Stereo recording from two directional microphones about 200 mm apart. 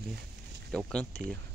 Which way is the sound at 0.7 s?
5° left (ahead or behind).